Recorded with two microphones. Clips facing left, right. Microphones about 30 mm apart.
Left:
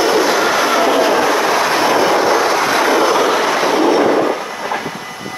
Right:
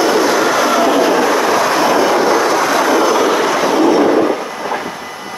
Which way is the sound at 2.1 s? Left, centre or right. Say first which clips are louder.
Right 1 dB; centre.